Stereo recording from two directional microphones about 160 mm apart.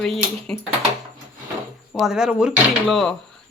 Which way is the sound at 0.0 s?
5° left (ahead or behind).